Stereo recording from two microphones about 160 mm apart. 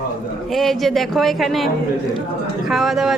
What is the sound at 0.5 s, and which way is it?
Speech, centre (ahead or behind).